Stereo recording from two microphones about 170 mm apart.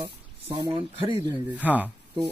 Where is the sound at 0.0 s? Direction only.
25° right (ahead or behind).